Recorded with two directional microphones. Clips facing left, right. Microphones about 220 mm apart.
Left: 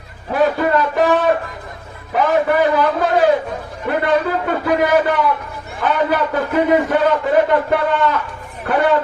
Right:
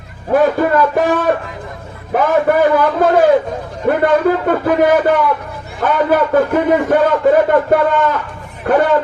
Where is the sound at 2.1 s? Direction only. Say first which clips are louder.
Right 3 dB; 50° right (ahead or behind).